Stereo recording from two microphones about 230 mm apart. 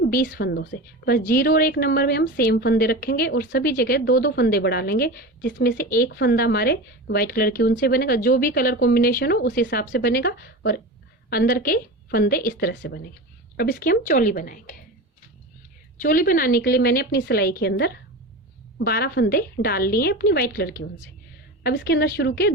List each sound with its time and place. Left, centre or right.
0.0 s a woman's voice: left
16.0 s a woman's voice: left